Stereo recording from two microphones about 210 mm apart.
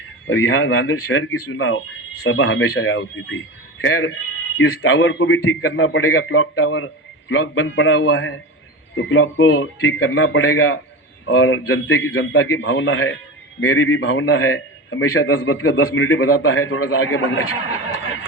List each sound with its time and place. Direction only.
0.3 s a man's voice: 70° left (ahead or behind)
11.3 s a man's voice: 65° left (ahead or behind)
13.6 s a man's voice: 80° left